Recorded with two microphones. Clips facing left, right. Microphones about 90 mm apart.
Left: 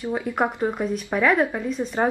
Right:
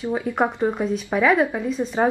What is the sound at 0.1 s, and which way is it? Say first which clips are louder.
Speech: right 2 dB; centre (ahead or behind).